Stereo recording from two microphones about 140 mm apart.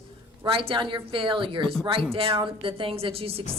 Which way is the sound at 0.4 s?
40° right (ahead or behind).